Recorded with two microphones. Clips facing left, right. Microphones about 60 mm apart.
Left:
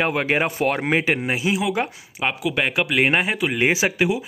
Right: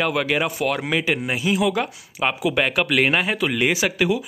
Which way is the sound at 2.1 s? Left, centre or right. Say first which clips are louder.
Right 2 dB; centre.